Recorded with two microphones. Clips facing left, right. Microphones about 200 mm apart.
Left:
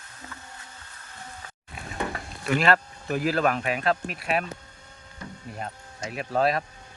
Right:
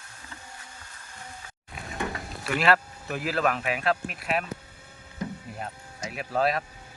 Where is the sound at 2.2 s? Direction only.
5° right (ahead or behind).